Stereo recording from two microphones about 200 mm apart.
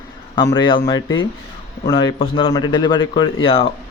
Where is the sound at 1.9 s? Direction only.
25° left (ahead or behind).